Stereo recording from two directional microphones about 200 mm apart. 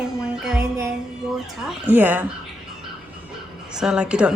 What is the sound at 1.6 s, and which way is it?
Speech, 10° right (ahead or behind).